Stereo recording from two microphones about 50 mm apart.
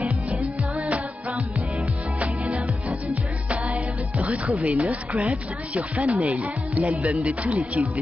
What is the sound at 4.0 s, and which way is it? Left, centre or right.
Speech, right.